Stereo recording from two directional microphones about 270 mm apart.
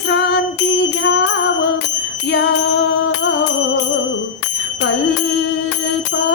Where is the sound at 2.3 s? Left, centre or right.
Left.